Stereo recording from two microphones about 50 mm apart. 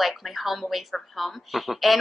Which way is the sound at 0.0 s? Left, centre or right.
Centre.